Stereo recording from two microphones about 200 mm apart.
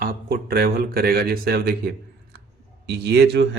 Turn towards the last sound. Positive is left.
turn(degrees=-55)  # may be behind; listen again after turning